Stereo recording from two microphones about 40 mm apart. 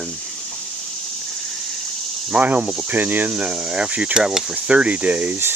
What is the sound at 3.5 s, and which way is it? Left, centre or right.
Speech, right.